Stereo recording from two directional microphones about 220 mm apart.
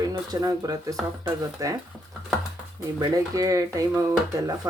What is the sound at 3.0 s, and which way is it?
Speech, 15° right (ahead or behind).